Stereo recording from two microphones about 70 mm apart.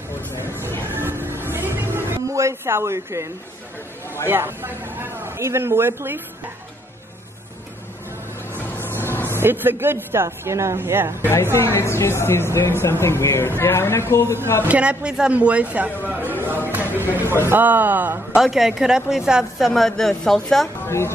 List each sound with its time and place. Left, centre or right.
0.9 s music: right
2.3 s speech: right
4.3 s speech: right
9.3 s a woman's voice: right
10.8 s a woman's voice: right
11.5 s a woman's voice: left
14.6 s speech: centre
18.3 s a woman's voice: centre
19.7 s speech: centre
20.8 s a woman's voice: left